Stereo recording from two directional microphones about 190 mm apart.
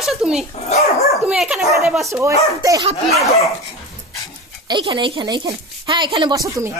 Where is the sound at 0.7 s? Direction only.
35° left (ahead or behind).